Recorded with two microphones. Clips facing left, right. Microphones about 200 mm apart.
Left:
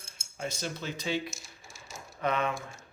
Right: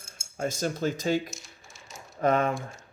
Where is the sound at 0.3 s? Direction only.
45° right (ahead or behind).